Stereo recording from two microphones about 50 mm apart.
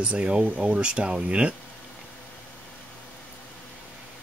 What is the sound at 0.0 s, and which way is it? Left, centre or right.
Speech, right.